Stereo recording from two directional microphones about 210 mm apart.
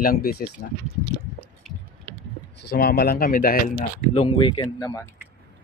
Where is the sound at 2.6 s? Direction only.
50° left (ahead or behind).